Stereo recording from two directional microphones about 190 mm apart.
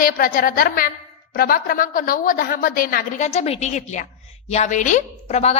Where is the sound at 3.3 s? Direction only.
35° left (ahead or behind).